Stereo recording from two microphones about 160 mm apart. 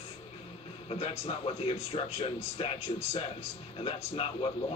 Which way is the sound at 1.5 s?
40° left (ahead or behind).